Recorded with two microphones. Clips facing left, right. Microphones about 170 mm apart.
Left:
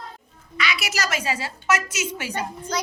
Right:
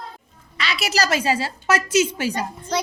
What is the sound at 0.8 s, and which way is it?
A woman's voice, 35° right (ahead or behind).